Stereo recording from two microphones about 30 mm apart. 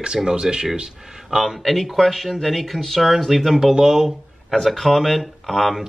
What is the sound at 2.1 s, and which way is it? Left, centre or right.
Speech, centre.